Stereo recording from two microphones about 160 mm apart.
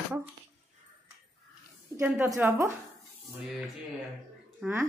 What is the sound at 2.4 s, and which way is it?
Speech, 10° right (ahead or behind).